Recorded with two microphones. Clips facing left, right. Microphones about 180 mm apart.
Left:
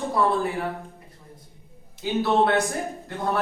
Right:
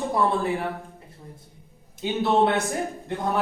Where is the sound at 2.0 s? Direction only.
15° right (ahead or behind).